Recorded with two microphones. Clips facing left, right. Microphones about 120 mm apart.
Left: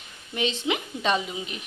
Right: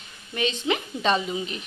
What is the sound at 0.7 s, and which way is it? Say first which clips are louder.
Speech: right 3 dB; 10° left (ahead or behind).